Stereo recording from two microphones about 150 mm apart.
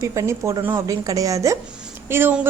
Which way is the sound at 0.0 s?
20° right (ahead or behind).